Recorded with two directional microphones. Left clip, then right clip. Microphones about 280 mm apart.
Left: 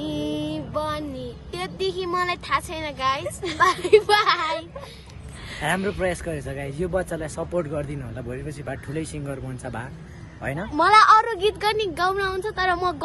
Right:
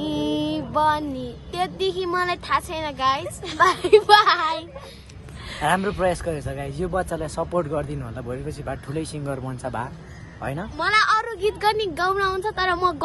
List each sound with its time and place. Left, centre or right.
0.0 s speech: centre
5.7 s speech: centre
10.7 s speech: centre
11.4 s speech: centre